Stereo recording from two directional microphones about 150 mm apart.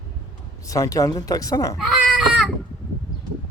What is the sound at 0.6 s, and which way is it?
Speech, 20° left (ahead or behind).